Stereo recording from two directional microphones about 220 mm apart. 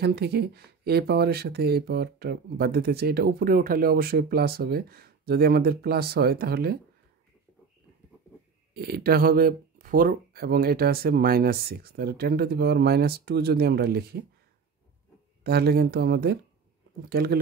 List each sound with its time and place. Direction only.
0.0 s speech: 45° right (ahead or behind)
8.7 s speech: 45° right (ahead or behind)
15.4 s speech: 45° right (ahead or behind)